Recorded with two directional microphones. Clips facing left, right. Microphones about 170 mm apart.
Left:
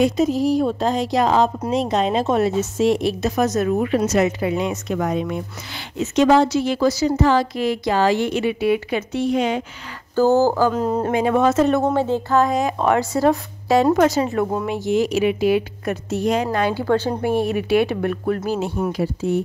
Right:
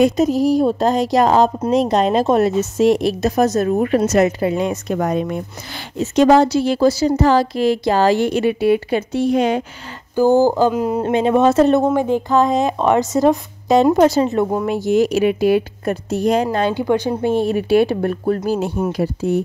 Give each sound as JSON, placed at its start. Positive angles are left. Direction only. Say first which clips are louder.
{"t": 0.0, "sound": "a woman's voice", "louder": "right 3 dB", "side_deg": -40}
{"t": 3.8, "sound": "a woman's voice", "louder": "right 3 dB", "side_deg": -45}
{"t": 10.1, "sound": "a sound", "louder": "right 2 dB", "side_deg": -15}
{"t": 11.0, "sound": "a woman's voice", "louder": "right 4 dB", "side_deg": -25}
{"t": 11.8, "sound": "a woman's voice", "louder": "right 3 dB", "side_deg": -15}
{"t": 14.7, "sound": "a woman's voice", "louder": "right 4 dB", "side_deg": -40}
{"t": 16.5, "sound": "a sound", "louder": "right 2 dB", "side_deg": -25}
{"t": 17.2, "sound": "a woman's voice", "louder": "right 3 dB", "side_deg": -25}
{"t": 18.9, "sound": "speech", "louder": "right 2 dB", "side_deg": -45}